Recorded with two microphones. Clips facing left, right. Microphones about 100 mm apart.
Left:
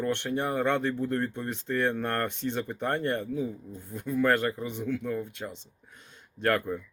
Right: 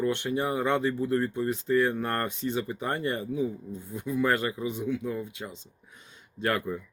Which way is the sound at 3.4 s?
55° left (ahead or behind).